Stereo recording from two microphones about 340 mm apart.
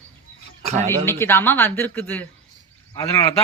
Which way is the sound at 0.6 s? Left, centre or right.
Centre.